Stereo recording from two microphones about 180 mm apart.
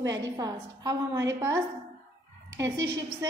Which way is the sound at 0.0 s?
20° right (ahead or behind).